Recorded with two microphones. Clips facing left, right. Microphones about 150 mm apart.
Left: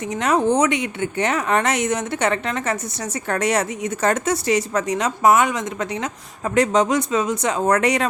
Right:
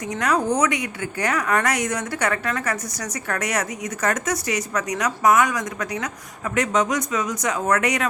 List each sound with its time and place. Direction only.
0.1 s a woman's voice: 25° left (ahead or behind)